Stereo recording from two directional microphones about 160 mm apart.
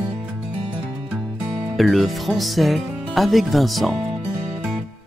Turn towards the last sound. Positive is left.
turn(degrees=0)  # may be behind; listen again after turning